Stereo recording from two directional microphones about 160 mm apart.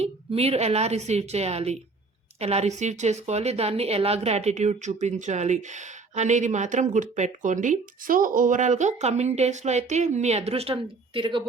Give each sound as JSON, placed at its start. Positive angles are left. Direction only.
{"t": 0.0, "sound": "a woman's voice", "side_deg": -40}